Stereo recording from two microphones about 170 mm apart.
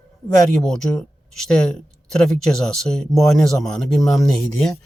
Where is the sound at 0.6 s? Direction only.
5° left (ahead or behind).